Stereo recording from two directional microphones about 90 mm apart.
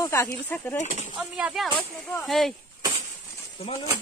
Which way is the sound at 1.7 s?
20° left (ahead or behind).